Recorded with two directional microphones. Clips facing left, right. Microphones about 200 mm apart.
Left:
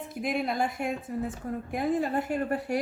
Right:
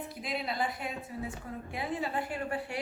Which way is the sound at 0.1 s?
50° left (ahead or behind).